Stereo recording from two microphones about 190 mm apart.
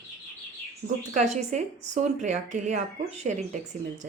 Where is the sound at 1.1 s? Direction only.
40° right (ahead or behind).